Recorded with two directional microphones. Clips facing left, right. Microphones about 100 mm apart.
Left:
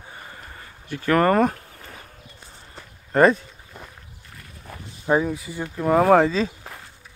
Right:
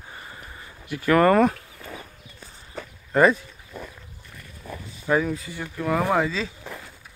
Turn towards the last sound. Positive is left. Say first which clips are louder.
# left 7 dB
turn(degrees=40)  # may be behind; listen again after turning